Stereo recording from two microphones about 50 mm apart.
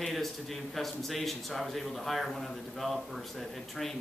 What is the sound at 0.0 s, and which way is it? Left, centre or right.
A man's voice, centre.